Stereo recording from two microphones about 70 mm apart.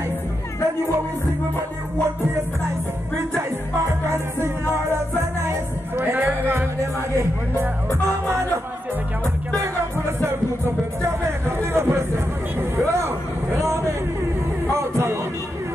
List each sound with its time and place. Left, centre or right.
5.4 s music: right
11.4 s speech: right
12.5 s a sound: right
14.7 s music: right